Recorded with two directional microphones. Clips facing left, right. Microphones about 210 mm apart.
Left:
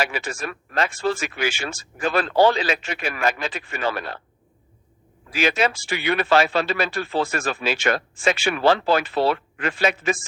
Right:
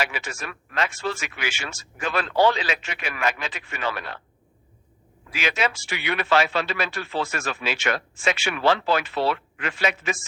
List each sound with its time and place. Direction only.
0.0 s speech: 35° left (ahead or behind)
5.3 s speech: 35° left (ahead or behind)